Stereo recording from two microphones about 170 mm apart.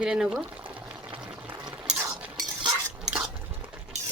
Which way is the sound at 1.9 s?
10° right (ahead or behind).